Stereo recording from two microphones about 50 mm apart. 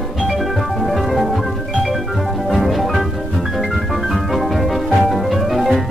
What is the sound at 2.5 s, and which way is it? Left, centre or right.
Music, centre.